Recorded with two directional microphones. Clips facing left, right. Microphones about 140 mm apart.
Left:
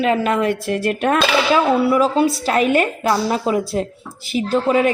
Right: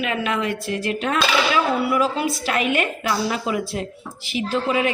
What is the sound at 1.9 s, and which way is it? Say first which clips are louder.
A woman's voice: left 6 dB; 35° left (ahead or behind).